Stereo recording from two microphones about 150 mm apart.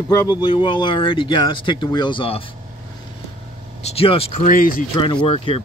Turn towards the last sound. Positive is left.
turn(degrees=40)  # may be behind; listen again after turning